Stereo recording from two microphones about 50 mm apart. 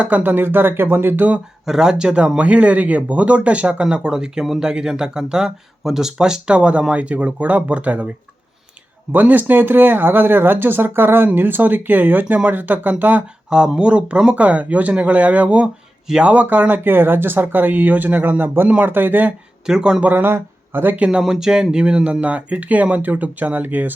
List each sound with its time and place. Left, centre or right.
0.0 s speech: right
1.6 s speech: centre; by 8.1 s right
9.1 s speech: right
13.5 s speech: centre; by 19.3 s right
19.6 s speech: centre
20.0 s speech: right
20.2 s speech: right
21.1 s speech: centre; by 23.9 s right